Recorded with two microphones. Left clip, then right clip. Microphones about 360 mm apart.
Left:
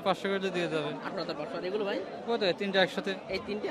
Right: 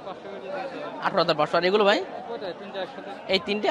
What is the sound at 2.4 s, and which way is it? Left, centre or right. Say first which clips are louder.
Speech: left 6 dB; left.